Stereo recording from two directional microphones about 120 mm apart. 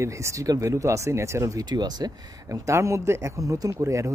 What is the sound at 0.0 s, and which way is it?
Speech, 25° right (ahead or behind).